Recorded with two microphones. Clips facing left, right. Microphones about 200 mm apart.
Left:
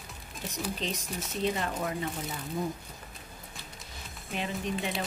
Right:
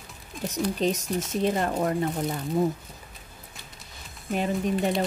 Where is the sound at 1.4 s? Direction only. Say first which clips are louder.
Right 5 dB; 50° right (ahead or behind).